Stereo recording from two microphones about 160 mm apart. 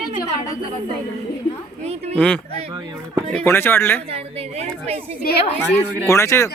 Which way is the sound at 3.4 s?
15° left (ahead or behind).